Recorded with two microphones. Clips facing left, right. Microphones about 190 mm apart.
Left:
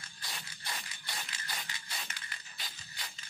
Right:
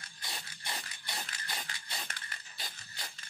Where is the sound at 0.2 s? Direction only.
25° right (ahead or behind).